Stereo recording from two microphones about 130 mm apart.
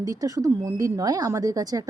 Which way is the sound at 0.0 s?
25° right (ahead or behind).